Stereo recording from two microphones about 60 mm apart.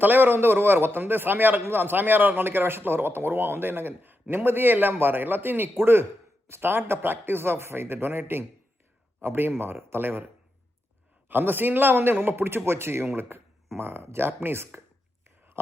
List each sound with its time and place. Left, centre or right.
0.0 s a man's voice: right
11.3 s a man's voice: right
15.6 s a sound: right